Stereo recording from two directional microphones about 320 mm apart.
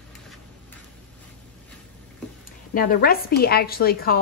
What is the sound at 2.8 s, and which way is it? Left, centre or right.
Speech, left.